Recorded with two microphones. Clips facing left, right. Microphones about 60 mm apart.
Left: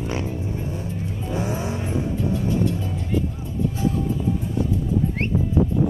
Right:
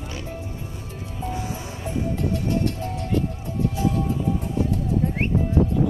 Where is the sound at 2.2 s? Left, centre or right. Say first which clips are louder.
Left 2 dB; right.